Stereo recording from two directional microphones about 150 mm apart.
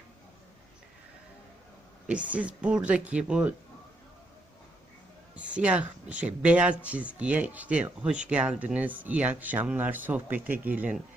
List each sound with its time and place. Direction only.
2.0 s speech: 10° right (ahead or behind)
5.3 s speech: 10° right (ahead or behind)